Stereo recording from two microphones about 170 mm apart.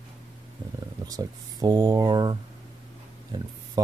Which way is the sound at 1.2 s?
20° right (ahead or behind).